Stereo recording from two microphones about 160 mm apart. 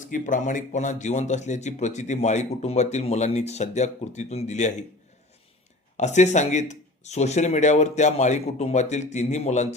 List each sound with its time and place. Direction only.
0.0 s speech: 55° left (ahead or behind)
6.0 s speech: 45° left (ahead or behind)